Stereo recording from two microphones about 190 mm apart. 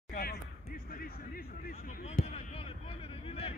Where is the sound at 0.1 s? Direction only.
55° left (ahead or behind).